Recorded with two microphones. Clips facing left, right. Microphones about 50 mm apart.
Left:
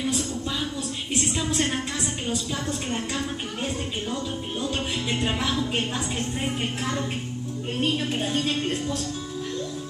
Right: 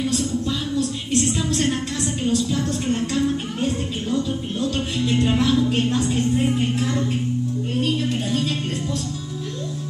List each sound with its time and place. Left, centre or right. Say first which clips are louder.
0.7 s a sound: right 7 dB; centre
2.2 s a woman's voice: right 10 dB; centre
7.8 s music: right 1 dB; left